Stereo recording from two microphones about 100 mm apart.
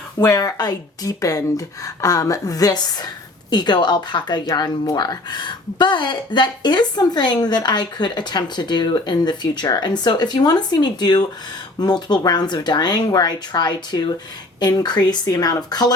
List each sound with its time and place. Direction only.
0.2 s speech: 35° left (ahead or behind)